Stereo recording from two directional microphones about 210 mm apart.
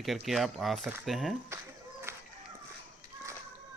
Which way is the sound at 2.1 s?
10° right (ahead or behind).